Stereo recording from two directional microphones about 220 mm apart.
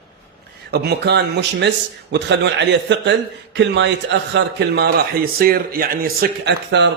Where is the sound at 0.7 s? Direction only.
45° right (ahead or behind).